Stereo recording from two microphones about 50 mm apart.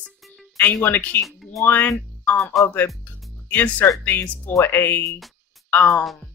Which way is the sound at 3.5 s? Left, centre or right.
Left.